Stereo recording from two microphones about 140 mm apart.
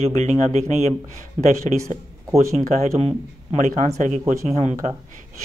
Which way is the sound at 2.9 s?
50° right (ahead or behind).